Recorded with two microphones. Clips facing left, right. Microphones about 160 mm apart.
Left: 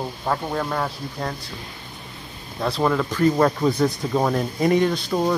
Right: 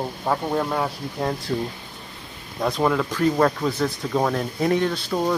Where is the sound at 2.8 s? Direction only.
Centre (ahead or behind).